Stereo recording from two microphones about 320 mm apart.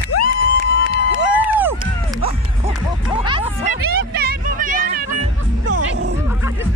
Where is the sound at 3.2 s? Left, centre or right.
Centre; by 6.1 s right.